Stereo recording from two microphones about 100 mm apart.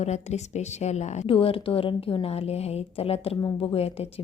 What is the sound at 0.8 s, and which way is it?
A woman's voice, 80° left.